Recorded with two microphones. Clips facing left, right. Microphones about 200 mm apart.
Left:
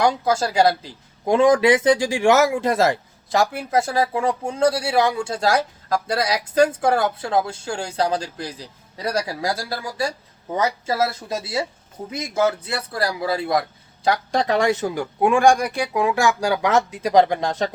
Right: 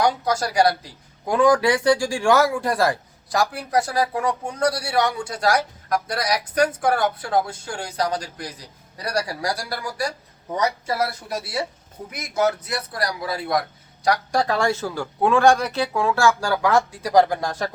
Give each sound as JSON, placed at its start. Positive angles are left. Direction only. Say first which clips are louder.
{"t": 0.0, "sound": "speech", "louder": "left 2 dB", "side_deg": 25}